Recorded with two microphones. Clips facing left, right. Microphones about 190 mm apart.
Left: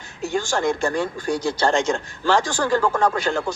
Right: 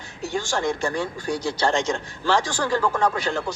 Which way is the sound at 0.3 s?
45° left (ahead or behind).